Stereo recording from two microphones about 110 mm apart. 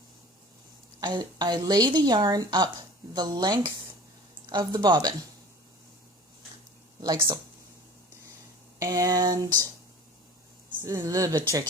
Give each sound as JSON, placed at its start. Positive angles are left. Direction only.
{"t": 0.9, "sound": "a woman's voice", "side_deg": -40}
{"t": 7.0, "sound": "speech", "side_deg": -45}
{"t": 8.8, "sound": "a woman's voice", "side_deg": -35}
{"t": 10.8, "sound": "a woman's voice", "side_deg": -25}